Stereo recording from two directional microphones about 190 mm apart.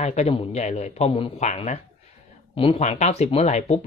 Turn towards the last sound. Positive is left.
turn(degrees=35)  # may be behind; listen again after turning